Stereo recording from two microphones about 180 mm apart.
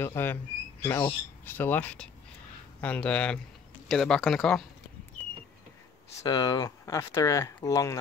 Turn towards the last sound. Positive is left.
turn(degrees=15)  # may be behind; listen again after turning